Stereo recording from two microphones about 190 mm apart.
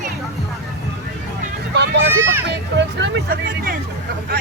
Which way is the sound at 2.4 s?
65° right (ahead or behind).